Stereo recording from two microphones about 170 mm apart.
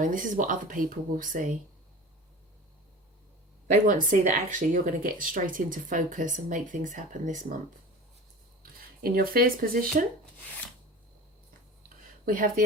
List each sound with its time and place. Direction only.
0.0 s speech: 50° right (ahead or behind)
3.8 s speech: 50° right (ahead or behind)
9.0 s speech: 60° right (ahead or behind)
12.2 s speech: 55° right (ahead or behind)